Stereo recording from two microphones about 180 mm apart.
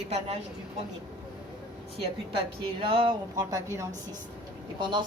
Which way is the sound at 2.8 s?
30° right (ahead or behind).